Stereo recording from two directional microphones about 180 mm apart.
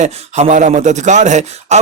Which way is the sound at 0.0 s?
40° right (ahead or behind).